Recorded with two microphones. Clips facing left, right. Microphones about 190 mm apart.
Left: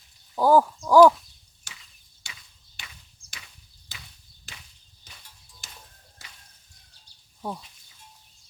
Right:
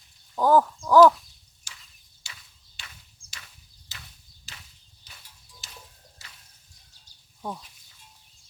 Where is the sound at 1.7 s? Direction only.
60° left (ahead or behind).